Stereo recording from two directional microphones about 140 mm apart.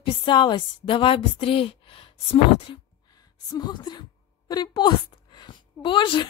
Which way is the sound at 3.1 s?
30° left (ahead or behind).